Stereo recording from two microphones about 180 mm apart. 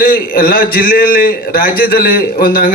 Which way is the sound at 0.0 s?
55° left (ahead or behind).